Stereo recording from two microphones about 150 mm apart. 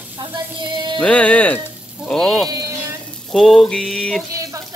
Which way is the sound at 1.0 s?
10° left (ahead or behind).